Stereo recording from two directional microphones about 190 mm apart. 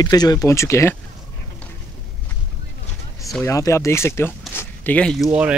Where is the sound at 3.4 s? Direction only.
15° left (ahead or behind).